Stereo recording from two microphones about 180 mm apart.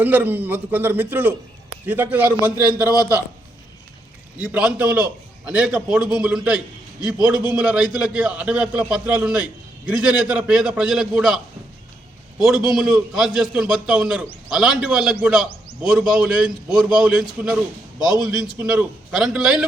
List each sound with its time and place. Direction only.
0.0 s a man's voice: 10° right (ahead or behind)
2.9 s a man's voice: 20° left (ahead or behind)
4.4 s a man's voice: 5° right (ahead or behind)
12.4 s a man's voice: centre (ahead or behind)